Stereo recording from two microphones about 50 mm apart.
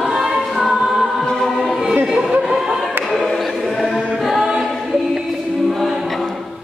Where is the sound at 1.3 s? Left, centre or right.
Centre.